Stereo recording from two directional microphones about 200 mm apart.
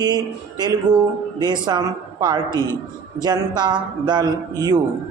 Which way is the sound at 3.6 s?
20° right (ahead or behind).